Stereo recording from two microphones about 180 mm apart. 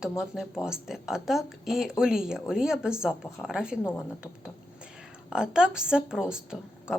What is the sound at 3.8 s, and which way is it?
Speech, 10° left (ahead or behind).